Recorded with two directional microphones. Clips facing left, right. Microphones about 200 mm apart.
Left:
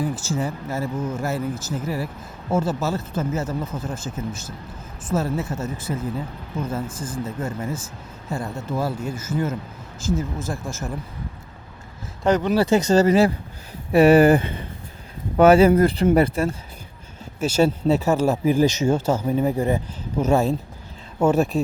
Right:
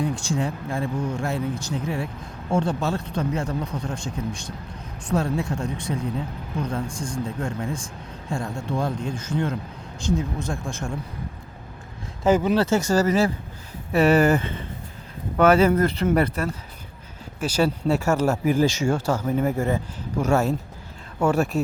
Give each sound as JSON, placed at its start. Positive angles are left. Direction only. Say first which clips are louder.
{"t": 0.0, "sound": "speech", "louder": "even", "side_deg": 5}
{"t": 12.2, "sound": "speech", "louder": "even", "side_deg": -5}
{"t": 12.5, "sound": "speech", "louder": "left 3 dB", "side_deg": 15}
{"t": 16.0, "sound": "speech", "louder": "left 3 dB", "side_deg": 10}
{"t": 17.4, "sound": "speech", "louder": "left 3 dB", "side_deg": 25}